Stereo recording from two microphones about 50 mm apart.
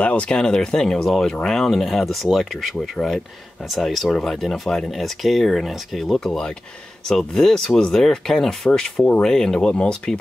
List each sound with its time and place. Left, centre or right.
0.0 s speech: left
0.4 s speech: centre